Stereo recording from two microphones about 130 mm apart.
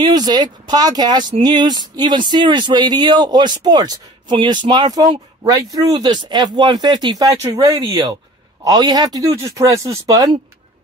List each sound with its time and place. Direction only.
0.0 s speech: 30° right (ahead or behind)